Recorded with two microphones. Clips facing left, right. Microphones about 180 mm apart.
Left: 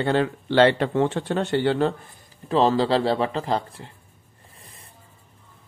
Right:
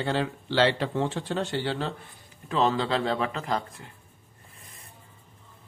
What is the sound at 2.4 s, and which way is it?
Speech, 35° left (ahead or behind).